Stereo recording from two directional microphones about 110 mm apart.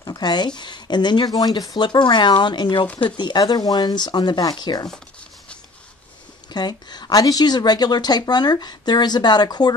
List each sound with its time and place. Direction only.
0.0 s a woman's voice: 40° left (ahead or behind)
6.5 s a woman's voice: 40° left (ahead or behind)